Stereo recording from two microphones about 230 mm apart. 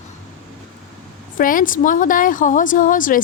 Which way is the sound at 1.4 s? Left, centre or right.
Left.